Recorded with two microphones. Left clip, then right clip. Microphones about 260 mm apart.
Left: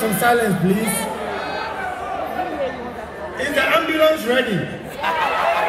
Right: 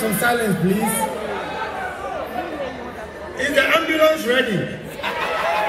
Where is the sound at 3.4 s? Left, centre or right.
Left.